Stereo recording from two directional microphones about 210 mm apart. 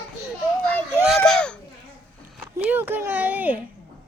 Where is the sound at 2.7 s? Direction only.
10° right (ahead or behind).